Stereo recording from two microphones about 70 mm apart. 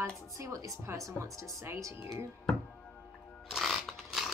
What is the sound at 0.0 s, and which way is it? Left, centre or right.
Speech, right.